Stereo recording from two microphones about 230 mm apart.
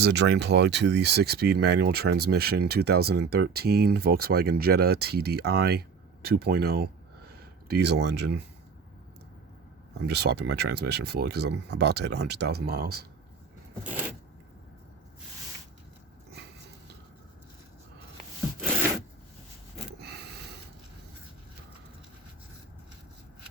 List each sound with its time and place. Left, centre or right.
0.0 s speech: right
10.1 s speech: right
20.0 s snort: right